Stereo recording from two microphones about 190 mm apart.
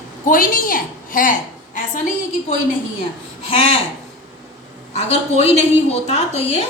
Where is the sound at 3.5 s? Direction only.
30° left (ahead or behind).